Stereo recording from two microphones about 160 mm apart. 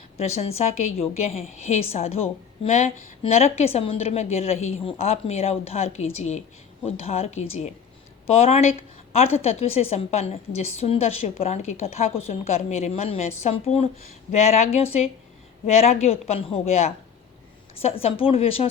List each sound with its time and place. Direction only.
0.2 s a woman's voice: 40° left (ahead or behind)